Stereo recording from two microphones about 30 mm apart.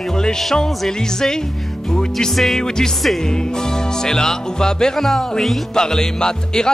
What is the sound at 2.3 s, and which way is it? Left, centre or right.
Music, centre.